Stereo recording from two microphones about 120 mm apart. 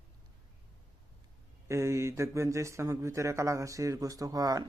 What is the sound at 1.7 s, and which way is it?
Speech, 25° right (ahead or behind).